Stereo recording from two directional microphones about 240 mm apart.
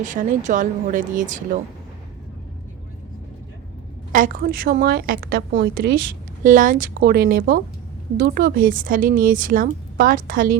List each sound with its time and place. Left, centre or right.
0.0 s speech: right
4.1 s speech: right